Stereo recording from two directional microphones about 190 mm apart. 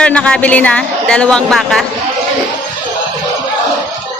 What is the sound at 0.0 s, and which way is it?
A woman's voice, 5° left (ahead or behind).